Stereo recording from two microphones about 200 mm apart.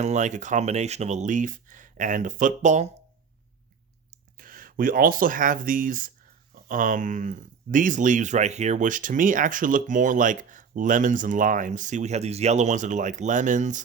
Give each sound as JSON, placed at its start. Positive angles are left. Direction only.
{"t": 0.0, "sound": "speech", "side_deg": -35}
{"t": 4.4, "sound": "speech", "side_deg": -45}